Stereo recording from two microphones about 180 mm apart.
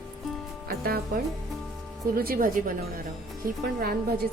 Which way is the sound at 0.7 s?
55° right (ahead or behind).